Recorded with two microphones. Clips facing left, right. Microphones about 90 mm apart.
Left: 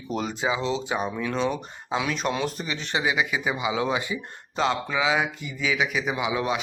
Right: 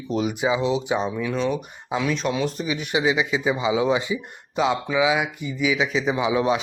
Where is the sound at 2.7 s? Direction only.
15° right (ahead or behind).